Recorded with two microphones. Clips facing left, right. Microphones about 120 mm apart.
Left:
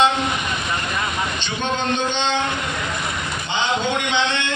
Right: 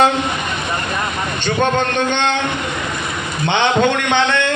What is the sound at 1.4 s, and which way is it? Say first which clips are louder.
Speech: right 12 dB; 60° right (ahead or behind).